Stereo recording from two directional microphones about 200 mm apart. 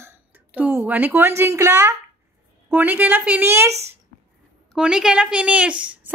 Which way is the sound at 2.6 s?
10° right (ahead or behind).